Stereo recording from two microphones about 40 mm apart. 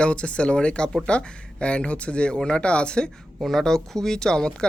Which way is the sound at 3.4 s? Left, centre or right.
Centre.